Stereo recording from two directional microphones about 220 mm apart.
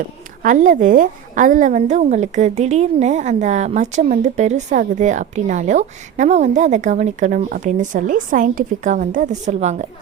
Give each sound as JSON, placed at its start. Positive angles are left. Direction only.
{"t": 0.4, "sound": "a woman's voice", "side_deg": -35}